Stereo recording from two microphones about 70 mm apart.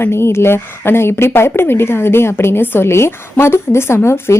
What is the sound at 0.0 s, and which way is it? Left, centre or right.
Speech, left.